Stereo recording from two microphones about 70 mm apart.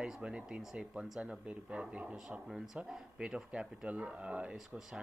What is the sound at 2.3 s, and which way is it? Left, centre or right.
Speech, centre.